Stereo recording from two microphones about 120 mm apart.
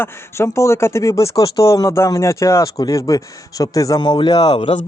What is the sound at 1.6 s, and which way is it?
Speech, 25° left (ahead or behind).